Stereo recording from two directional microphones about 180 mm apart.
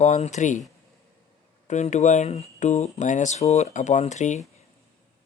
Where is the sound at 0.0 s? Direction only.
40° left (ahead or behind).